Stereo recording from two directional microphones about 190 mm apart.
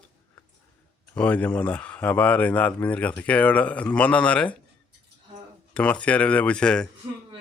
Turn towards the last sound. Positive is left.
turn(degrees=5)  # may be behind; listen again after turning